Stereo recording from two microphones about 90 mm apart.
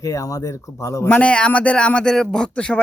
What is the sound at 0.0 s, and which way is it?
Speech, 40° left (ahead or behind).